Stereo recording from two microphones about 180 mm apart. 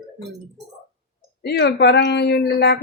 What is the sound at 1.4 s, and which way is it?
Speech, 75° left (ahead or behind).